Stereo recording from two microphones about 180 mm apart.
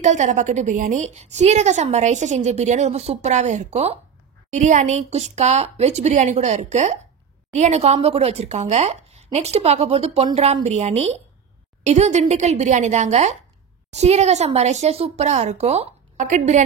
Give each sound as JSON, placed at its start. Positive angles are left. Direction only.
{"t": 0.0, "sound": "a woman's voice", "side_deg": -40}